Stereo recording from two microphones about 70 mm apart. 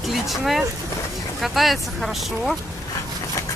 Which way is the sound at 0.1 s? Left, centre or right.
Centre.